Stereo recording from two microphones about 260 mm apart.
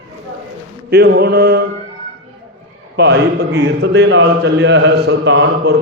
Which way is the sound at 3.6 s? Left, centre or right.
Right.